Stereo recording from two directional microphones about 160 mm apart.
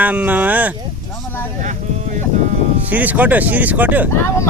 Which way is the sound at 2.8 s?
10° right (ahead or behind).